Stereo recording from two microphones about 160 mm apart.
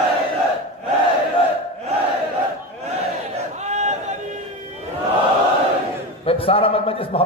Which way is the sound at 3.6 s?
45° right (ahead or behind).